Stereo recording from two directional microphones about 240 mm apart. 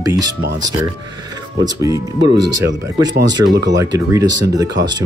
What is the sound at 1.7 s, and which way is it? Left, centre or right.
Speech, centre.